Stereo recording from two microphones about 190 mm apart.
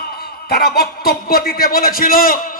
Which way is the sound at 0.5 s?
55° left (ahead or behind).